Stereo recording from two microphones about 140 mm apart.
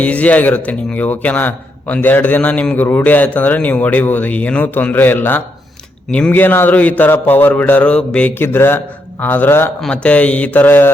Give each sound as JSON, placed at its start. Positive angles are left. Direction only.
{"t": 0.0, "sound": "a man's voice", "side_deg": 10}